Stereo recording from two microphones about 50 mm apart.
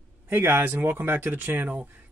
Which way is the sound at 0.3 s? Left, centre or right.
Right.